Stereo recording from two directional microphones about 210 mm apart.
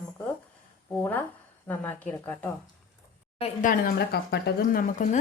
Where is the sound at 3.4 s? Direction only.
40° left (ahead or behind).